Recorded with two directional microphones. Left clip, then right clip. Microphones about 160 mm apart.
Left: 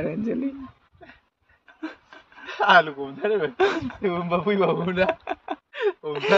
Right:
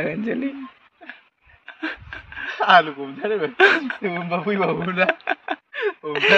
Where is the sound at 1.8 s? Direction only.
Centre (ahead or behind).